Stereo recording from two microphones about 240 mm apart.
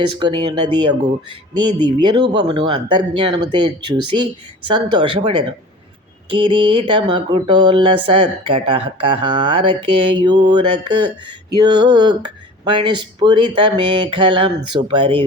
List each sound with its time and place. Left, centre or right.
0.2 s speech: centre
4.7 s speech: centre